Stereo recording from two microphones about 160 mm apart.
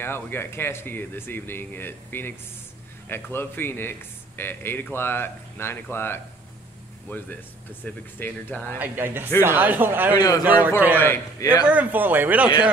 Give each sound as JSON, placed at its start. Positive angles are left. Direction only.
{"t": 0.0, "sound": "speech", "side_deg": 15}
{"t": 8.7, "sound": "speech", "side_deg": -10}
{"t": 11.0, "sound": "speech", "side_deg": 15}
{"t": 11.6, "sound": "speech", "side_deg": -10}